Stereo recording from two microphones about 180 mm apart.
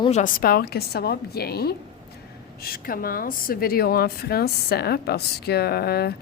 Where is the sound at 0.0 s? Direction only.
40° left (ahead or behind).